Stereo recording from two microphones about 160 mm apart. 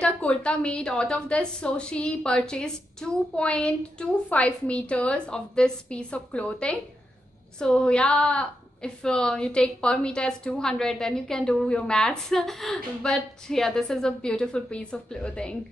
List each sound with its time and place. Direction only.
0.0 s a woman's voice: 5° left (ahead or behind)